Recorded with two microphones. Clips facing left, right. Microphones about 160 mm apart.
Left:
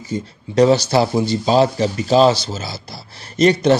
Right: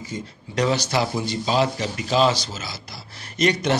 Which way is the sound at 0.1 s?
30° left (ahead or behind).